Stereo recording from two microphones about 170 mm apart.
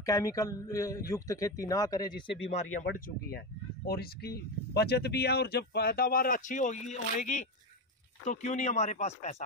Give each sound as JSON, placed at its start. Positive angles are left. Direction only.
{"t": 0.0, "sound": "a man's voice", "side_deg": 20}
{"t": 3.3, "sound": "speech", "side_deg": 65}